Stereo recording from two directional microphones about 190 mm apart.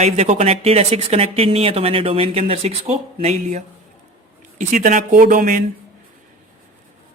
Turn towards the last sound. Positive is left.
turn(degrees=-45)  # may be behind; listen again after turning